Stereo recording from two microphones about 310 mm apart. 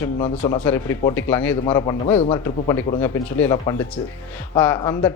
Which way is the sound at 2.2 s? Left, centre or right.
Centre.